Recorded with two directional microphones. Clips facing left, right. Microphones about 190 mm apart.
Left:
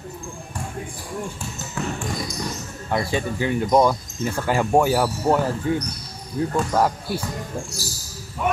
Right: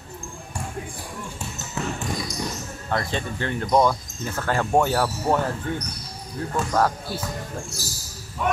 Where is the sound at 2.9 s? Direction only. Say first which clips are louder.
Left 3 dB; 10° left (ahead or behind).